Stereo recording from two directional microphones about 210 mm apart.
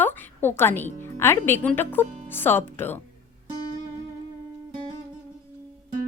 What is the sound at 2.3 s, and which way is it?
Speech, 10° left (ahead or behind).